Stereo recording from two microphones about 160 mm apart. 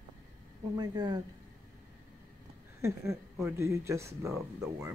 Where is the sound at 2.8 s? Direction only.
15° right (ahead or behind).